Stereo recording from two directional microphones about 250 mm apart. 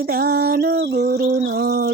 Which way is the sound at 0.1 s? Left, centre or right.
Right.